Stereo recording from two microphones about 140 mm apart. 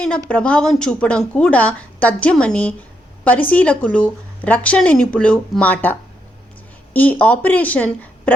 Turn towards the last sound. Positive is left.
turn(degrees=10)  # may be behind; listen again after turning